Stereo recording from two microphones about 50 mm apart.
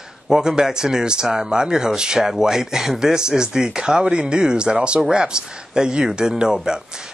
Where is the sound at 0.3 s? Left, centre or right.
Centre.